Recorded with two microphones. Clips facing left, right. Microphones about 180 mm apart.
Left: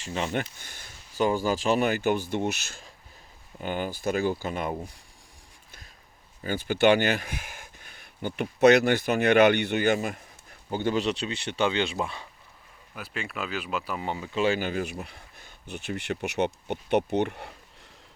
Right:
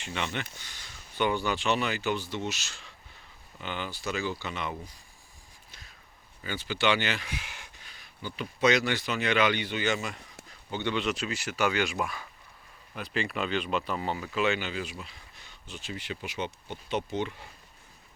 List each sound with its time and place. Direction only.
0.0 s speech: 35° left (ahead or behind)
6.4 s speech: 50° left (ahead or behind); by 12.3 s 25° left (ahead or behind)
12.9 s speech: centre (ahead or behind)
14.0 s speech: 20° left (ahead or behind)
14.3 s speech: 30° left (ahead or behind)
14.6 s speech: 50° left (ahead or behind)